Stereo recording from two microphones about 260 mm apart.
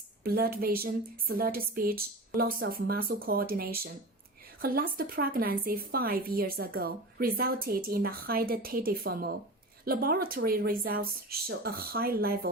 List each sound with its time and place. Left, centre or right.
0.2 s speech: right